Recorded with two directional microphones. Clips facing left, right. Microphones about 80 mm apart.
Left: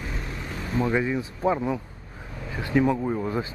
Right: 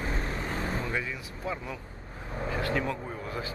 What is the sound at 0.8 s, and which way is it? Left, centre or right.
Speech, left.